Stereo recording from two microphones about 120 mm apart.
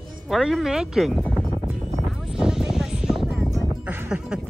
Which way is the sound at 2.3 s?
5° right (ahead or behind).